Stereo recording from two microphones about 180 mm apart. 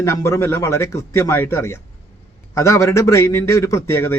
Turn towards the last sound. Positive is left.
turn(degrees=15)  # may be behind; listen again after turning